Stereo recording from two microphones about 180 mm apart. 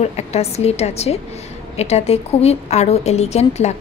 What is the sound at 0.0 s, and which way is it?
A woman's voice, 35° left (ahead or behind).